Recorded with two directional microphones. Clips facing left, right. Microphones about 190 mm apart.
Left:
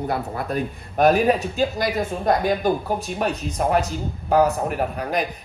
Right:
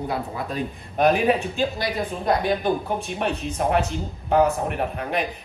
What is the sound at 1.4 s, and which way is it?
Speech, 40° left (ahead or behind).